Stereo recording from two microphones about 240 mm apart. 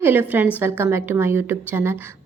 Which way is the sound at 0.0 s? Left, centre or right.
Centre.